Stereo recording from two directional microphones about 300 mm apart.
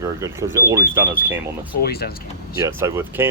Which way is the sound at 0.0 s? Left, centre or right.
Centre.